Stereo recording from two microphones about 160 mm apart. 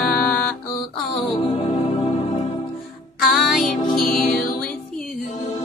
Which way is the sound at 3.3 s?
Centre (ahead or behind).